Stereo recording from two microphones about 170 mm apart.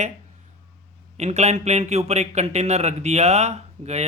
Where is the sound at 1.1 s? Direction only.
40° right (ahead or behind).